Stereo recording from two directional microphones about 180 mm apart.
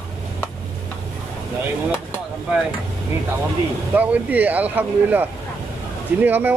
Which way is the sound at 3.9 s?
10° right (ahead or behind).